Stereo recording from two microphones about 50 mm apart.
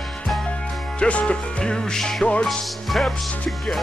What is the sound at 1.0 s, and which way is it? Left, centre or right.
Music, left.